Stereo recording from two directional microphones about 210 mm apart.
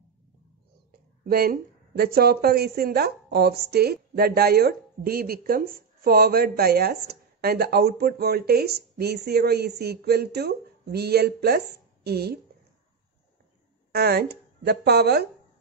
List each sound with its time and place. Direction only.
1.3 s a woman's voice: 45° right (ahead or behind)
13.9 s a woman's voice: 50° right (ahead or behind)